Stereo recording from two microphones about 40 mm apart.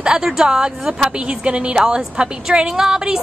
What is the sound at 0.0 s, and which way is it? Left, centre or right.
A woman's voice, centre.